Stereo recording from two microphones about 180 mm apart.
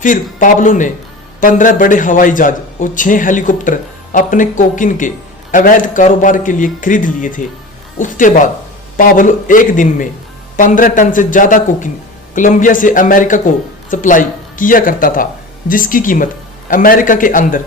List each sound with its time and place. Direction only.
0.0 s a man's voice: 45° left (ahead or behind)